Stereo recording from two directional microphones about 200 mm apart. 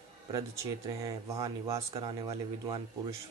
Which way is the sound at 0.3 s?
20° right (ahead or behind).